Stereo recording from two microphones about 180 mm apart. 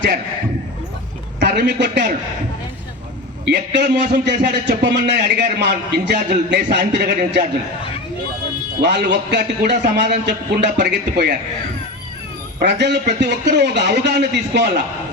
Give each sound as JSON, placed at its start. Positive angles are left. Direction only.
{"t": 1.4, "sound": "a man's voice", "side_deg": -70}
{"t": 3.4, "sound": "a man's voice", "side_deg": -70}
{"t": 8.8, "sound": "a man's voice", "side_deg": -70}
{"t": 12.5, "sound": "a man's voice", "side_deg": -75}